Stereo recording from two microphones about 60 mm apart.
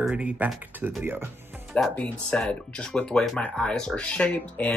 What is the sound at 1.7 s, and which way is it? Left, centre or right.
Speech, centre.